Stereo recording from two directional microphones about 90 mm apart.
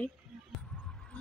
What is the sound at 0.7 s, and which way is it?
Basketball bounce, 10° left (ahead or behind).